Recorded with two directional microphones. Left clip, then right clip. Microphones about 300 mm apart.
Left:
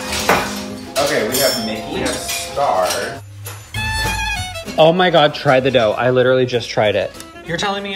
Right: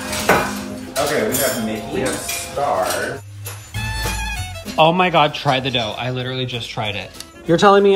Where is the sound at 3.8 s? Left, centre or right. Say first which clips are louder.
Left 5 dB; centre.